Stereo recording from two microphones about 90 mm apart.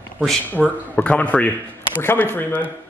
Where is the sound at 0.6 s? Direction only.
Centre (ahead or behind).